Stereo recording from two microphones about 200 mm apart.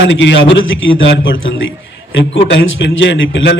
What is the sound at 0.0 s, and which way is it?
A man's voice, 65° left (ahead or behind).